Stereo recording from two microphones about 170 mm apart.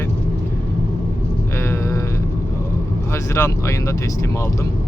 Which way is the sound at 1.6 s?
15° left (ahead or behind).